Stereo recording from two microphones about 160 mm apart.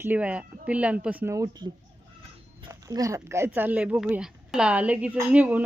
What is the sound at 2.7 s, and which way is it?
Speech, 20° right (ahead or behind).